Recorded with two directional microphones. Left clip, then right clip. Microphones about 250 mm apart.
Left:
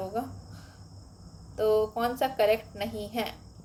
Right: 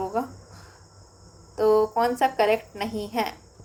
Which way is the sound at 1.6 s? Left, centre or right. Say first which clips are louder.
Right 5 dB; right.